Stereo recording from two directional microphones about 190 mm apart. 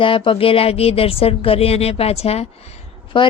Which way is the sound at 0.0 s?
25° left (ahead or behind).